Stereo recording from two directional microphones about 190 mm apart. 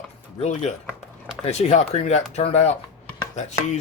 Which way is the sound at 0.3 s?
35° left (ahead or behind).